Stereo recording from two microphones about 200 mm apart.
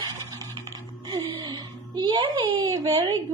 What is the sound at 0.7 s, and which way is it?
Music, 20° right (ahead or behind).